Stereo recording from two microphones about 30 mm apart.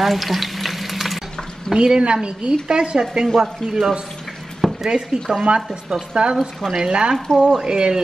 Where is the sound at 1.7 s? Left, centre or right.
Right.